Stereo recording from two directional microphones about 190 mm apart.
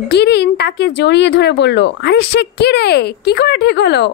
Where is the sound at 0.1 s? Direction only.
60° left (ahead or behind).